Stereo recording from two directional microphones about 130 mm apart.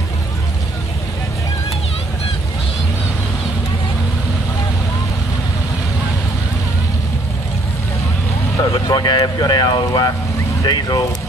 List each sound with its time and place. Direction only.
8.5 s speech: 30° left (ahead or behind)